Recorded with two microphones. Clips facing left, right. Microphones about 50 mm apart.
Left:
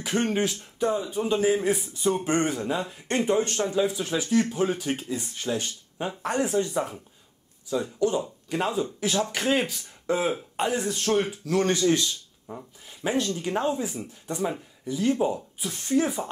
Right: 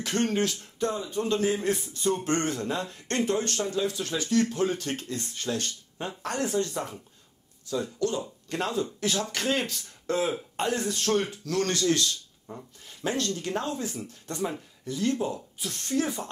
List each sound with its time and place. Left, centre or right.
0.0 s speech: centre